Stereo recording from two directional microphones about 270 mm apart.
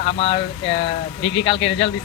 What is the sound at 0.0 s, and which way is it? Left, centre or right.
Speech, left.